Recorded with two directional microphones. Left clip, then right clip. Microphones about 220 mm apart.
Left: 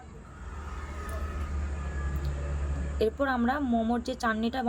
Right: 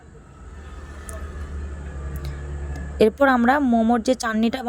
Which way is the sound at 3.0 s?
35° right (ahead or behind).